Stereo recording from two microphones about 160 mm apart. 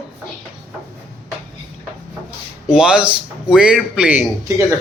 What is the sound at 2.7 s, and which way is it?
A man's voice, 5° right (ahead or behind).